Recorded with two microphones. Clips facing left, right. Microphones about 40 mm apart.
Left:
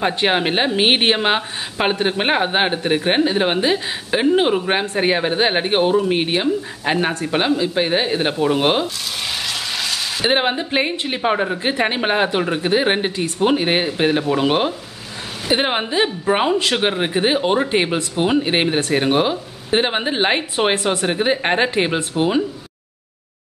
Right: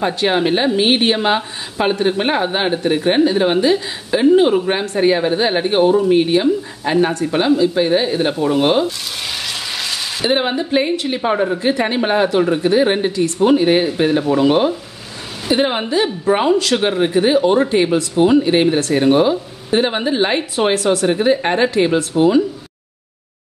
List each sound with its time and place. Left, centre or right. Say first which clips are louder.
0.0 s speech: right 2 dB; left
9.5 s a sound: even; centre
10.2 s speech: right 1 dB; left
16.3 s speech: right 4 dB; centre